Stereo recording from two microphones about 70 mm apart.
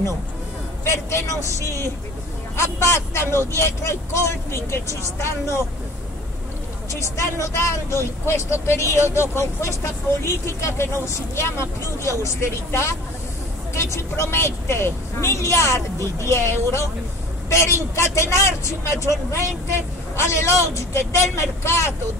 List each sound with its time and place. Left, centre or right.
0.8 s speech: left
2.5 s speech: left
6.9 s speech: left